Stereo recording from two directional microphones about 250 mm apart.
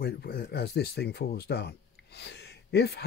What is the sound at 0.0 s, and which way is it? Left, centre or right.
Speech, left.